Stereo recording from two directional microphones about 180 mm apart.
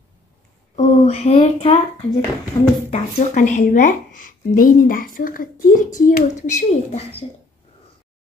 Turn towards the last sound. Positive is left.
turn(degrees=40)  # may be behind; listen again after turning